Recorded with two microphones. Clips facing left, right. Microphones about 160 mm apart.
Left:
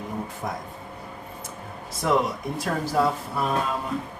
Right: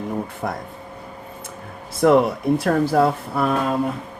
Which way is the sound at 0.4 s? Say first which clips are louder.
Right 4 dB; 65° right (ahead or behind).